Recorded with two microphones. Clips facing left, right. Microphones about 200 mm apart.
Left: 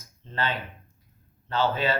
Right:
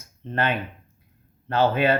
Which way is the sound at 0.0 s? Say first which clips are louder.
Right 5 dB; 60° right (ahead or behind).